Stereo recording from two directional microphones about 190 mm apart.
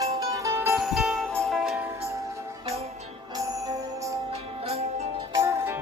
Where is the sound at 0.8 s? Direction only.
Centre (ahead or behind).